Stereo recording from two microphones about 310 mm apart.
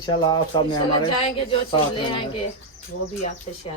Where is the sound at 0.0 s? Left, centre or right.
Centre.